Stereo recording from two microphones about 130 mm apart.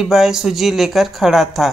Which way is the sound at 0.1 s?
5° right (ahead or behind).